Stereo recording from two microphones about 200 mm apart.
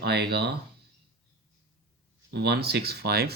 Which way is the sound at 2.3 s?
55° right (ahead or behind).